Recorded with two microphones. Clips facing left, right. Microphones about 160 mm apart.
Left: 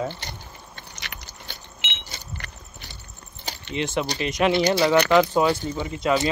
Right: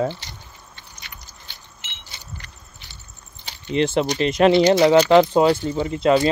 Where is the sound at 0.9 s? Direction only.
75° left (ahead or behind).